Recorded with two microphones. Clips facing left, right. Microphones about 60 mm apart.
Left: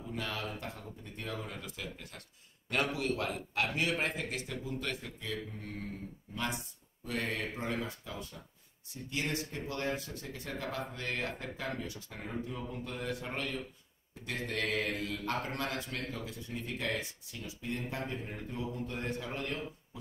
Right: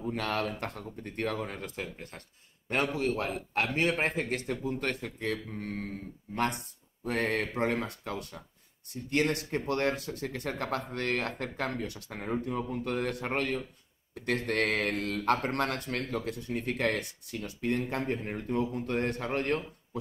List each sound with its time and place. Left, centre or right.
0.0 s a man's voice: right